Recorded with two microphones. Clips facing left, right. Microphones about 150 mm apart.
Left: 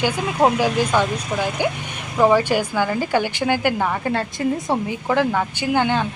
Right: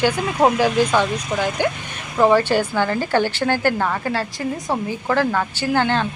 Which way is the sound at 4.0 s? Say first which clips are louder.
Left 2 dB; 20° left (ahead or behind).